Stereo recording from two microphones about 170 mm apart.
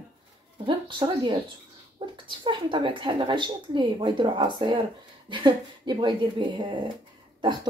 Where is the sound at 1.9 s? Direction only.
30° right (ahead or behind).